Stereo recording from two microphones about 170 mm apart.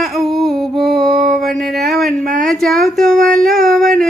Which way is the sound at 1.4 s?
Centre (ahead or behind).